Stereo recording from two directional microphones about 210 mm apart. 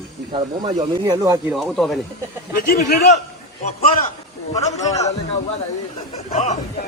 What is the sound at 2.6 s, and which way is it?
Speech, 50° left (ahead or behind).